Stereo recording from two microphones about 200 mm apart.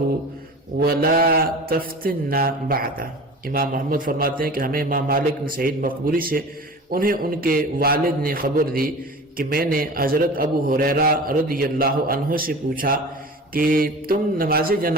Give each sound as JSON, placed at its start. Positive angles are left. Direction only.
{"t": 0.8, "sound": "mantra", "side_deg": -50}